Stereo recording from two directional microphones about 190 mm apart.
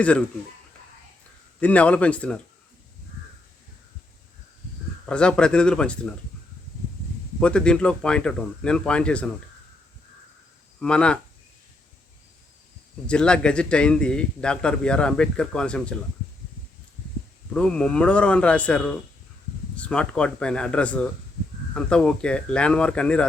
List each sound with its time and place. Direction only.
1.6 s speech: 5° left (ahead or behind)
5.0 s a man's voice: 5° left (ahead or behind)
7.3 s a man's voice: 5° left (ahead or behind)
10.8 s speech: 5° left (ahead or behind)
13.1 s a man's voice: 5° left (ahead or behind)
17.5 s a man's voice: 5° left (ahead or behind)